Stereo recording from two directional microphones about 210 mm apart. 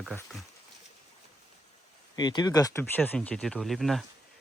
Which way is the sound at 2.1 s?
20° left (ahead or behind).